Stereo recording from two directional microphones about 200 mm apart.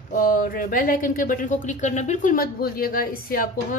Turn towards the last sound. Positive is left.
turn(degrees=45)  # may be behind; listen again after turning